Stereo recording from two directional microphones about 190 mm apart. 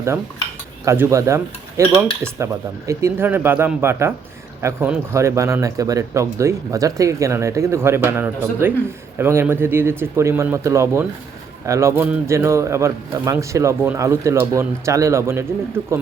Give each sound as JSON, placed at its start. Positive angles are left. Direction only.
{"t": 0.9, "sound": "speech", "side_deg": -15}